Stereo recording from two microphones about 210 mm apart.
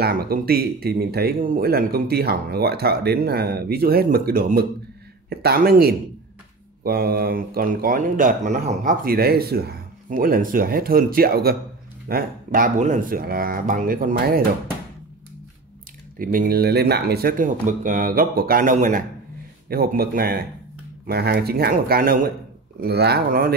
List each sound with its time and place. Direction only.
0.0 s speech: 45° right (ahead or behind)
16.2 s speech: 40° right (ahead or behind)